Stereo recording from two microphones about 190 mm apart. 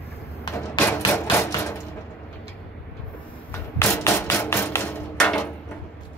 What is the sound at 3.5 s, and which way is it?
Hammer, 15° left (ahead or behind).